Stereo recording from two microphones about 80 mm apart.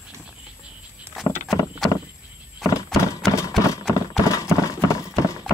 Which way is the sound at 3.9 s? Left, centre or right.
Left.